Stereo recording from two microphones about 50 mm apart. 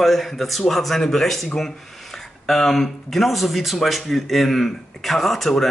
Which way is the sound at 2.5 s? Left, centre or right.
Centre.